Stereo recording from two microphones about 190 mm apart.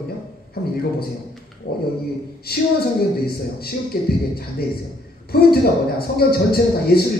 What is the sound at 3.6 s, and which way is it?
Speech, 55° left (ahead or behind).